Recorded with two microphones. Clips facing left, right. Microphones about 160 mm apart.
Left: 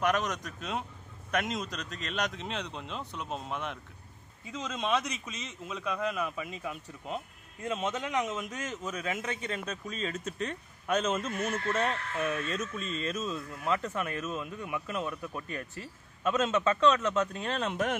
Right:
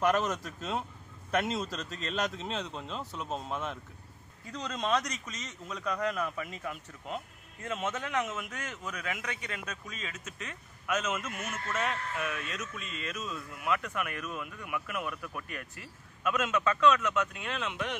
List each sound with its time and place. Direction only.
0.0 s a man's voice: 5° right (ahead or behind); by 17.9 s 40° left (ahead or behind)